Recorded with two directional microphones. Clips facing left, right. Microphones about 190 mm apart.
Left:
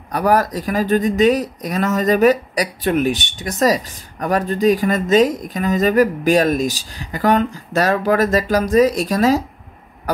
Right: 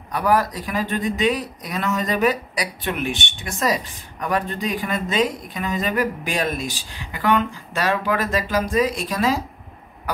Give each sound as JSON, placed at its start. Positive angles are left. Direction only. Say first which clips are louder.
{"t": 0.1, "sound": "speech", "louder": "left 4 dB", "side_deg": 40}